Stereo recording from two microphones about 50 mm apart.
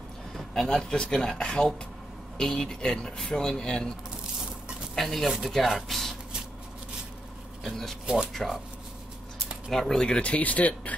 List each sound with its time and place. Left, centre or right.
0.6 s speech: centre
4.9 s speech: centre
8.3 s speech: centre
9.7 s speech: centre; by 11.0 s left